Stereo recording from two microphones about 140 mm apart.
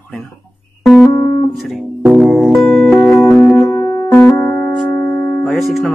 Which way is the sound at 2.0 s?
10° right (ahead or behind).